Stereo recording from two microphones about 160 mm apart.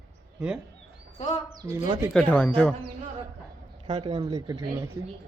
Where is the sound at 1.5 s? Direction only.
25° right (ahead or behind).